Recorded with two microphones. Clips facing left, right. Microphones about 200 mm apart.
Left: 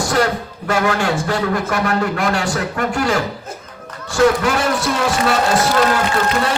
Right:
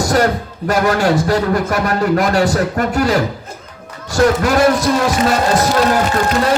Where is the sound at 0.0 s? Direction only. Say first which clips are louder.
Right 3 dB; 40° right (ahead or behind).